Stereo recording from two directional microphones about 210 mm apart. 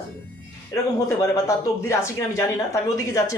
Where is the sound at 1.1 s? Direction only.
15° left (ahead or behind).